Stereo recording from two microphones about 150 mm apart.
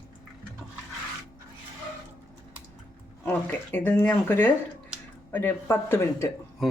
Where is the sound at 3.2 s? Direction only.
15° left (ahead or behind).